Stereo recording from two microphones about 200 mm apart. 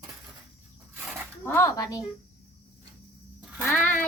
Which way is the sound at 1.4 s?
15° left (ahead or behind).